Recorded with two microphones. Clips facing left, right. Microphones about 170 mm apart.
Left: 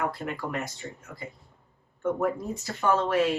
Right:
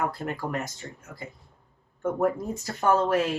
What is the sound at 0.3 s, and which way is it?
Speech, 45° right (ahead or behind).